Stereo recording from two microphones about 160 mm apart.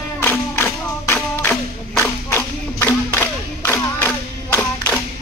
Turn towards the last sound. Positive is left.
turn(degrees=15)  # may be behind; listen again after turning